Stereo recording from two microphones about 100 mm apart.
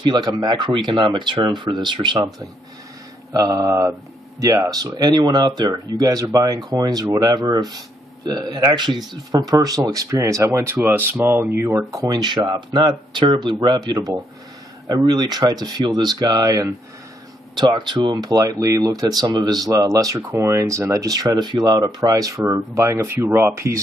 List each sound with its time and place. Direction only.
0.0 s speech: 45° right (ahead or behind)
3.3 s speech: 35° right (ahead or behind)
9.5 s speech: 40° right (ahead or behind)
10.8 s speech: 20° right (ahead or behind)
11.9 s speech: 40° right (ahead or behind)
17.6 s speech: 50° right (ahead or behind); by 23.8 s 30° right (ahead or behind)